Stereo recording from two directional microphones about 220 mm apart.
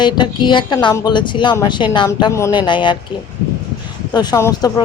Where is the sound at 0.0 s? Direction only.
20° left (ahead or behind).